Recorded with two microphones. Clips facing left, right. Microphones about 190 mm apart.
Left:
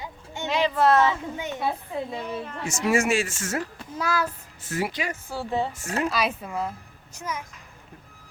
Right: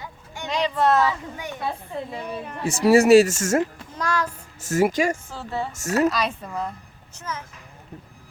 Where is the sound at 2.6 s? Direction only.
35° right (ahead or behind).